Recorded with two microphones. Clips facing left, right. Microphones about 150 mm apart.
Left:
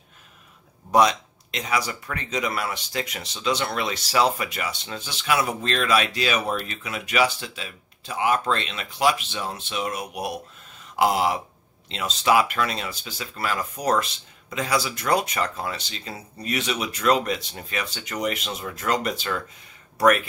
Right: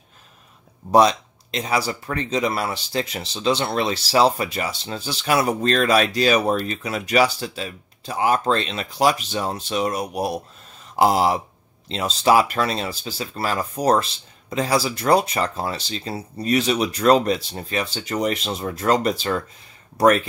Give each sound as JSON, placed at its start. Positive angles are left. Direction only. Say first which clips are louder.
{"t": 0.9, "sound": "speech", "louder": "right 3 dB", "side_deg": -30}